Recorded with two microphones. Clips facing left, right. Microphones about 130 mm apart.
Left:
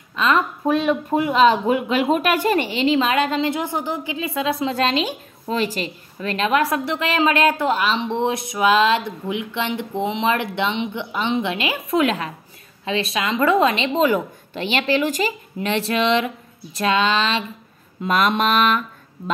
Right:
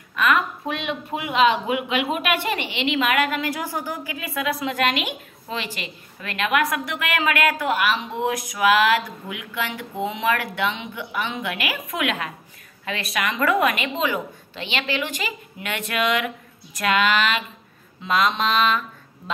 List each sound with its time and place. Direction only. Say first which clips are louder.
0.1 s a sound: left 1 dB; 25° left (ahead or behind)
0.7 s a woman's voice: left 9 dB; 40° left (ahead or behind)
14.0 s a woman's voice: left 6 dB; 45° left (ahead or behind); by 17.5 s 25° left (ahead or behind)
18.0 s mantra: left 3 dB; 50° left (ahead or behind)